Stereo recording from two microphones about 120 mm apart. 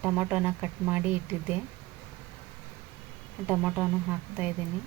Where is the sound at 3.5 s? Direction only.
10° right (ahead or behind).